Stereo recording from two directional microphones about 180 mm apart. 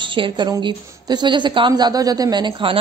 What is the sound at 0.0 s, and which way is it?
A woman's voice, 25° right (ahead or behind).